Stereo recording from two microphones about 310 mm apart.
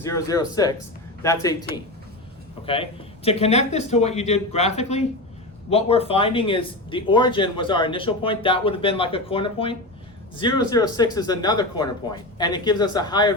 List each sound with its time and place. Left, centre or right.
0.0 s speech: centre
3.2 s speech: centre